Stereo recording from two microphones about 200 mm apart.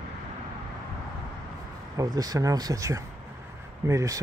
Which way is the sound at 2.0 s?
20° right (ahead or behind).